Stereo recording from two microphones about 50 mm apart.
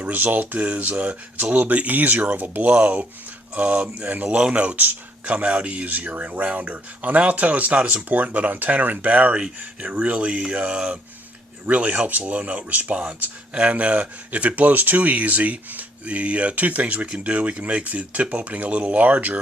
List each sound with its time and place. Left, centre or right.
0.0 s speech: right
0.6 s speech: right